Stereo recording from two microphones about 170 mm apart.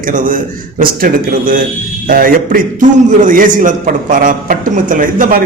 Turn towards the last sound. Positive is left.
turn(degrees=-50)  # may be behind; listen again after turning